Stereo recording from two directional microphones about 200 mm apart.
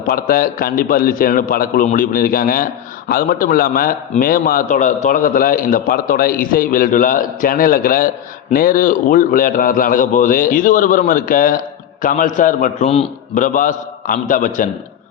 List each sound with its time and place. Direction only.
0.1 s a man's voice: 45° left (ahead or behind)